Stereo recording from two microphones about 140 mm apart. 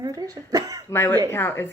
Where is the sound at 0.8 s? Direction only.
20° left (ahead or behind).